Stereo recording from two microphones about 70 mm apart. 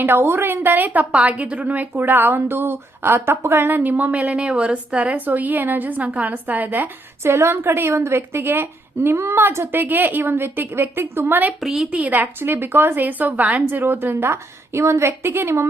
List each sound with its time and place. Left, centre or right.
0.0 s a woman's voice: right
7.3 s a woman's voice: right
9.8 s a woman's voice: right
11.6 s a woman's voice: centre
11.9 s a woman's voice: right